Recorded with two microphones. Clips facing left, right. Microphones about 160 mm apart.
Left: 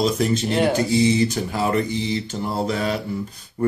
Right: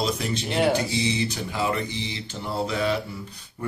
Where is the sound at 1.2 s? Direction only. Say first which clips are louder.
Left 5 dB; 40° left (ahead or behind).